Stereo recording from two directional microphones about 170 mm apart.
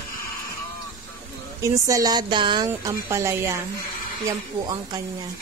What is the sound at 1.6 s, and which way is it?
A woman's voice, 20° right (ahead or behind).